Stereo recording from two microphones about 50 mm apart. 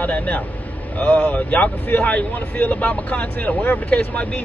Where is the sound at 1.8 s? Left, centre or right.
Left.